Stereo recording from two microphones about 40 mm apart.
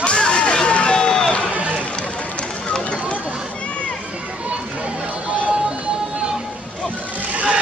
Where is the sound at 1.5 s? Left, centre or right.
Right.